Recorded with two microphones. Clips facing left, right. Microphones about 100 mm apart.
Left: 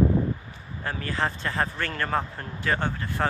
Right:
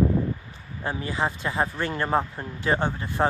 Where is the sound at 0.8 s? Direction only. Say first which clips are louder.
Right 1 dB; 15° right (ahead or behind).